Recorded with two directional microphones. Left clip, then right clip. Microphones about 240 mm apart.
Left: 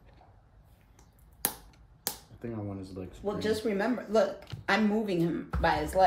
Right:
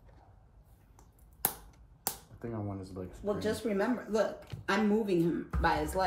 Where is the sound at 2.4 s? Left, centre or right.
Centre.